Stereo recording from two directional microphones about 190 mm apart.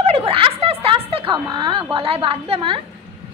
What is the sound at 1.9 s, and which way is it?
Speech, 30° right (ahead or behind).